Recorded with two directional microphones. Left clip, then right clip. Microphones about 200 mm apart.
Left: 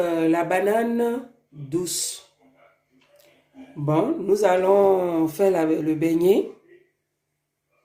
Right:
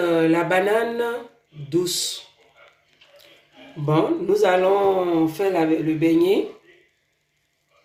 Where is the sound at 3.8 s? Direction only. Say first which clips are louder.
Right 1 dB; 65° left (ahead or behind).